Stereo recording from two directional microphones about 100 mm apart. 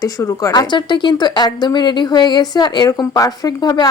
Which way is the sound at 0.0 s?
30° left (ahead or behind).